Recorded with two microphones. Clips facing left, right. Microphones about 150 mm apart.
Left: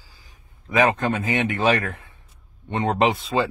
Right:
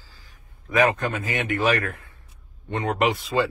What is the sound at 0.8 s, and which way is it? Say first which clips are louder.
Speech: left 1 dB; 25° left (ahead or behind).